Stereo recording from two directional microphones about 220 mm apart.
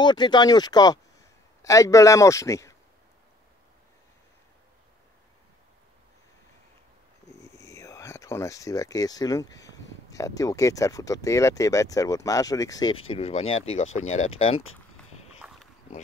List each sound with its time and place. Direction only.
0.0 s a man's voice: 20° left (ahead or behind)
7.3 s speech: 15° left (ahead or behind)
15.1 s walk: 30° left (ahead or behind)
15.4 s a sound: centre (ahead or behind)